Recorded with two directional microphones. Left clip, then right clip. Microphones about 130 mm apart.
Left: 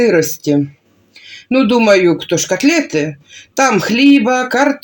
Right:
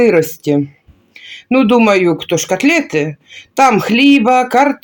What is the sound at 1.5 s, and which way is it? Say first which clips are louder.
Speech: even; 15° right (ahead or behind).